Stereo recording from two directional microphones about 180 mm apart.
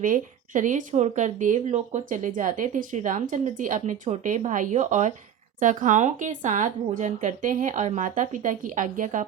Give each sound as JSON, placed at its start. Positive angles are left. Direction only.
{"t": 0.0, "sound": "speech", "side_deg": -45}